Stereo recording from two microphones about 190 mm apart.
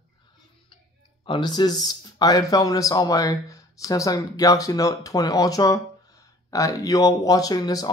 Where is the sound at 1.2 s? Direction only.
25° left (ahead or behind).